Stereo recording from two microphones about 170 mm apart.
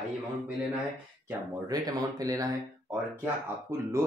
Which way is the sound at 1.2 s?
20° right (ahead or behind).